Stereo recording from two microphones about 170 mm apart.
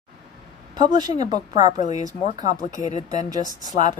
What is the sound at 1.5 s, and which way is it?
Speech, 45° left (ahead or behind).